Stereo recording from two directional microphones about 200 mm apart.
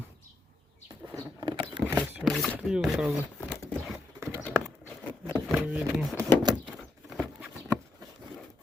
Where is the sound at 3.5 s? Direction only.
5° left (ahead or behind).